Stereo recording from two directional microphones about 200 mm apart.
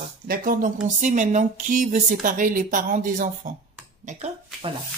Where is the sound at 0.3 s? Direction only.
45° right (ahead or behind).